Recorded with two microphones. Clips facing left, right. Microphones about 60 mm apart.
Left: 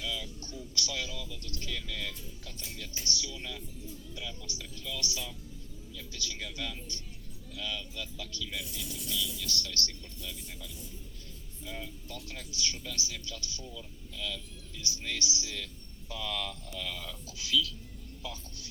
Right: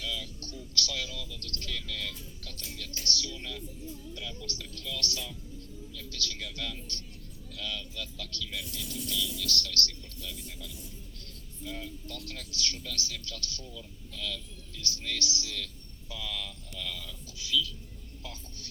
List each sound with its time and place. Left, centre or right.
0.0 s speech: centre
10.2 s speech: centre